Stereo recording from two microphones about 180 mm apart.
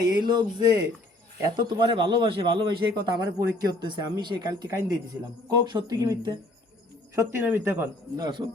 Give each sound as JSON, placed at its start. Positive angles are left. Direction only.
{"t": 0.0, "sound": "a man's voice", "side_deg": -25}